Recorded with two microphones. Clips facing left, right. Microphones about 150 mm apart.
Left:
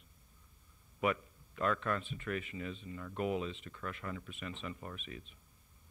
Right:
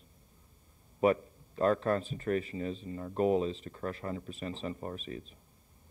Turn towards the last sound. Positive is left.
turn(degrees=-35)  # may be behind; listen again after turning